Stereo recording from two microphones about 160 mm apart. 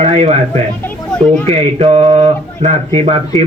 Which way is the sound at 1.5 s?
40° right (ahead or behind).